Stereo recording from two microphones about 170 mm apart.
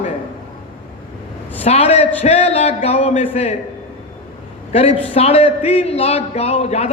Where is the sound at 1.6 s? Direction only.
40° left (ahead or behind).